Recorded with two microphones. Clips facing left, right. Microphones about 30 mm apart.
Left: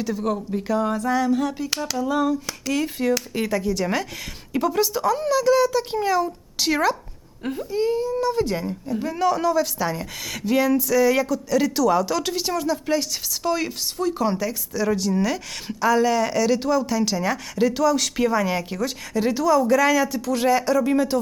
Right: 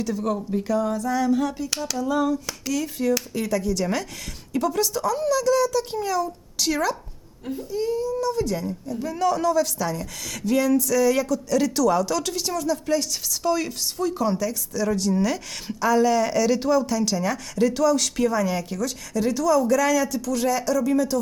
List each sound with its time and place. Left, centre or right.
0.3 s speech: centre
1.2 s speech: centre
2.7 s speech: left
7.4 s speech: left; by 17.0 s centre
17.0 s speech: centre
20.3 s speech: left